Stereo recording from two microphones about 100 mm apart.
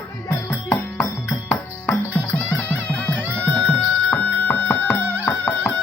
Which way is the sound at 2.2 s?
15° left (ahead or behind).